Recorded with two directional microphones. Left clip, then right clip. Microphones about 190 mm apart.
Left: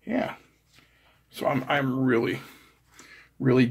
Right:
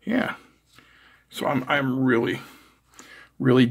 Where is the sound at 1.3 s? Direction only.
25° right (ahead or behind).